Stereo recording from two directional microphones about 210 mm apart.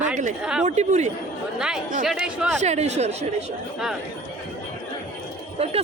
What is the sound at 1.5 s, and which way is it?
A man's voice, 5° right (ahead or behind).